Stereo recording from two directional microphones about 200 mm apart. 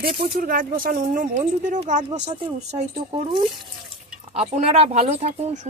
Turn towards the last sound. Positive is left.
turn(degrees=-30)  # may be behind; listen again after turning